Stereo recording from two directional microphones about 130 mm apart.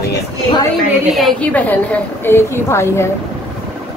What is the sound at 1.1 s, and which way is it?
A woman's voice, centre (ahead or behind).